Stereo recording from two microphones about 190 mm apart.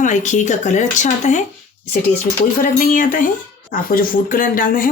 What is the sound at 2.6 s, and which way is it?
Speech, 45° left (ahead or behind).